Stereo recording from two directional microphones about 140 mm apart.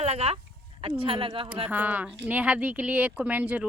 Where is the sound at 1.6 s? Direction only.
10° right (ahead or behind).